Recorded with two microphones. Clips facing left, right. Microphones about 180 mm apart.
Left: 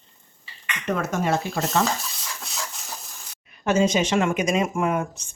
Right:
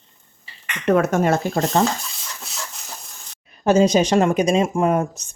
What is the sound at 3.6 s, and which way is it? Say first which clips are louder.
Speech: right 5 dB; 35° right (ahead or behind).